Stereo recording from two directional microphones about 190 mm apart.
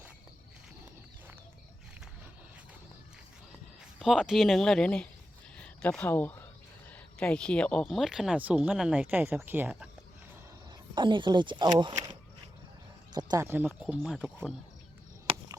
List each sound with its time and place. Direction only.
4.0 s speech: centre (ahead or behind)
10.9 s speech: 25° right (ahead or behind)
13.1 s speech: 20° right (ahead or behind)
13.7 s speech: centre (ahead or behind)
15.3 s a sound: 30° right (ahead or behind)